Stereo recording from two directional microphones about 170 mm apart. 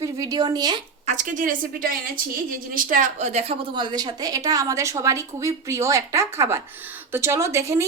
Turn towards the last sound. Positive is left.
turn(degrees=-15)  # may be behind; listen again after turning